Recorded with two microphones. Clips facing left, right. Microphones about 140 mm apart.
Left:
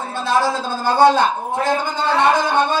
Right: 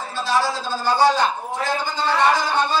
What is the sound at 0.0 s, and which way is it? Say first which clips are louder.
A man's voice: left 3 dB; 55° left (ahead or behind).